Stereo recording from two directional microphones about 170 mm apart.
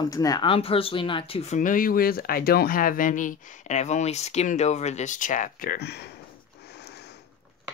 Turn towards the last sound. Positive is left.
turn(degrees=75)  # may be behind; listen again after turning